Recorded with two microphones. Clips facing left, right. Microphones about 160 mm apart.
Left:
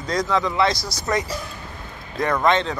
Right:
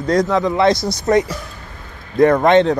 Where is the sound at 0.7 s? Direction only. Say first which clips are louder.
Right 10 dB; 25° right (ahead or behind).